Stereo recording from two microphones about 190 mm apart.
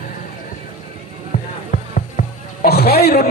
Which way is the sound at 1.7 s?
50° left (ahead or behind).